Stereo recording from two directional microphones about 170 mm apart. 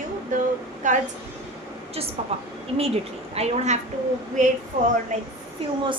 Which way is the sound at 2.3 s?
40° right (ahead or behind).